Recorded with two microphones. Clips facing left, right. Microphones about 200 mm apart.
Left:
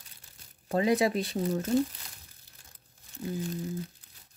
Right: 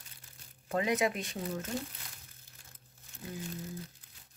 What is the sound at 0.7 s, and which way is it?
Speech, 35° left (ahead or behind).